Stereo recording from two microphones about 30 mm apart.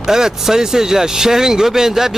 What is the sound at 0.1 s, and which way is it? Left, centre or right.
A man's voice, centre.